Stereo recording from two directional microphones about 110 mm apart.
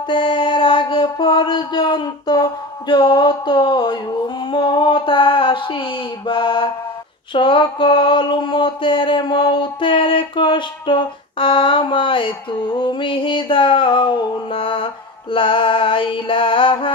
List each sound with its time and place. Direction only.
0.1 s mantra: 45° left (ahead or behind)
4.5 s a sound: 45° left (ahead or behind)
7.3 s mantra: 45° left (ahead or behind)